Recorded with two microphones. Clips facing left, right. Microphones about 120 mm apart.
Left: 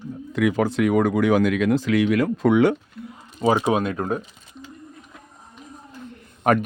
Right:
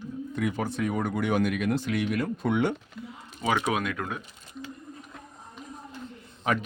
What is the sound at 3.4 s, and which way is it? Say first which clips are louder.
Speech: left 7 dB; 35° left (ahead or behind).